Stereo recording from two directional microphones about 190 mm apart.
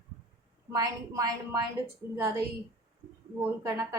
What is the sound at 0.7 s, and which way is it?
Speech, 15° right (ahead or behind).